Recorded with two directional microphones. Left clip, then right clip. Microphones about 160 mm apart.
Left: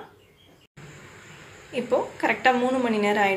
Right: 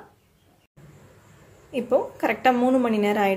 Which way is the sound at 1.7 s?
55° right (ahead or behind).